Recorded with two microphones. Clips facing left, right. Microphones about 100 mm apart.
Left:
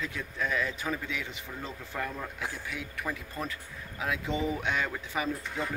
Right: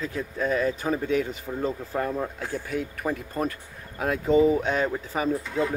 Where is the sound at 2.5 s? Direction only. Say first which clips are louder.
Right 9 dB; 45° right (ahead or behind).